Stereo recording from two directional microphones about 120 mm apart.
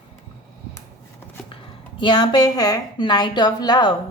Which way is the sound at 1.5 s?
45° left (ahead or behind).